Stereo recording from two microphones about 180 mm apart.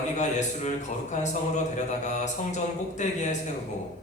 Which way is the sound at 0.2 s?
40° left (ahead or behind).